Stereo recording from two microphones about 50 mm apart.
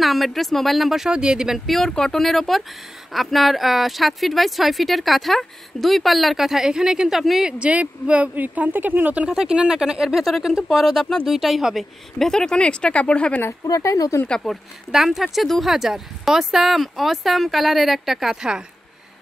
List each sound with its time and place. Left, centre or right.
0.0 s speech: centre
1.1 s speech: centre
1.7 s speech: centre
7.4 s speech: right
9.4 s speech: centre
12.3 s speech: centre
13.4 s speech: left
14.5 s speech: centre
14.9 s speech: centre